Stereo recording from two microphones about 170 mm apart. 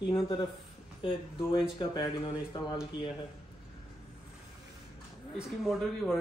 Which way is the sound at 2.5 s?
25° left (ahead or behind).